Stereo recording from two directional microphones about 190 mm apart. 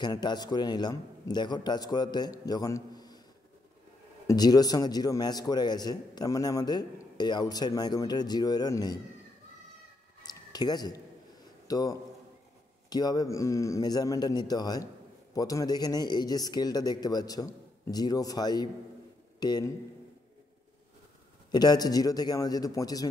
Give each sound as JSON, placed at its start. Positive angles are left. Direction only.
{"t": 0.0, "sound": "a man's voice", "side_deg": 20}
{"t": 4.3, "sound": "a man's voice", "side_deg": 20}
{"t": 10.2, "sound": "a sound", "side_deg": 20}
{"t": 11.6, "sound": "a man's voice", "side_deg": 20}
{"t": 21.5, "sound": "a man's voice", "side_deg": 20}